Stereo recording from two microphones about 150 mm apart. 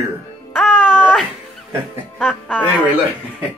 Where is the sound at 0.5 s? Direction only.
5° right (ahead or behind).